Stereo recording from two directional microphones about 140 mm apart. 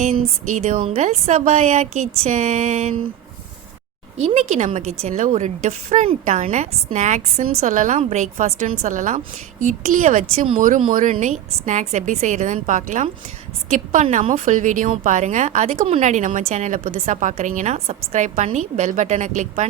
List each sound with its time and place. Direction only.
0.5 s a woman's voice: 55° right (ahead or behind)
1.3 s a sound: 50° right (ahead or behind)
4.2 s a woman's voice: 50° right (ahead or behind)